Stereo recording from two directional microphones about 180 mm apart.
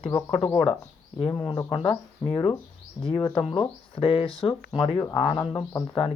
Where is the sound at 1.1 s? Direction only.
25° left (ahead or behind).